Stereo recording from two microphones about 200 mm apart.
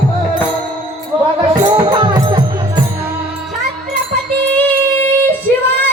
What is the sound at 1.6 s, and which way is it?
Music, 20° right (ahead or behind).